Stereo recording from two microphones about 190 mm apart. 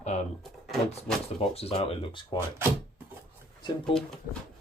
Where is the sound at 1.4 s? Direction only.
30° left (ahead or behind).